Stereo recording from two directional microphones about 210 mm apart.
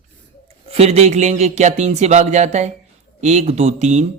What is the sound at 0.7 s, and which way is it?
Speech, 30° right (ahead or behind).